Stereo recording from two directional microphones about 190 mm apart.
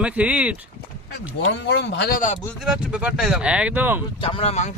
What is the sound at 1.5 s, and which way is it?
Speech, 65° left (ahead or behind).